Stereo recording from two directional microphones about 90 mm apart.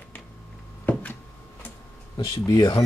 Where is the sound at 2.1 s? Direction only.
45° left (ahead or behind).